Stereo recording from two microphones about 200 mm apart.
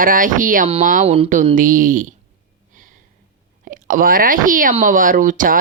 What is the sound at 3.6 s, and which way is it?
Speech, 45° right (ahead or behind).